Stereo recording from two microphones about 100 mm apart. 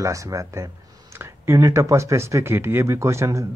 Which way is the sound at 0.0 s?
30° right (ahead or behind).